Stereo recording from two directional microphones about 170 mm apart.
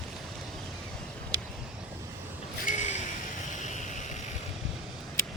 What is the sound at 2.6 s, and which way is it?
Gasp, 45° left (ahead or behind).